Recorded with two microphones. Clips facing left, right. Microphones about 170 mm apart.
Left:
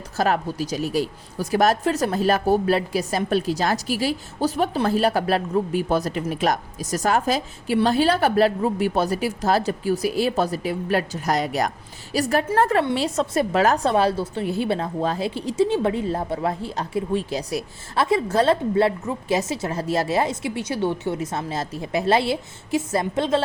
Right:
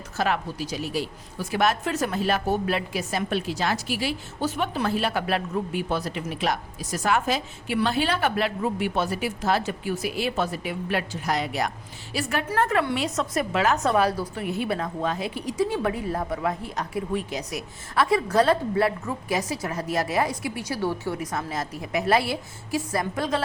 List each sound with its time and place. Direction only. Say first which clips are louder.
0.2 s a woman's voice: left 4 dB; 40° left (ahead or behind); by 23.4 s 25° left (ahead or behind)